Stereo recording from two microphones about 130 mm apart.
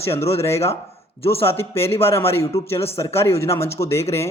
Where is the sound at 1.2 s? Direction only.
45° left (ahead or behind).